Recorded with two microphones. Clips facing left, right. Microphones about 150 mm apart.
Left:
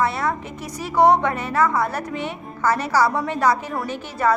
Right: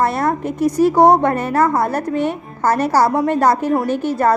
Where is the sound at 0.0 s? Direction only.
50° right (ahead or behind).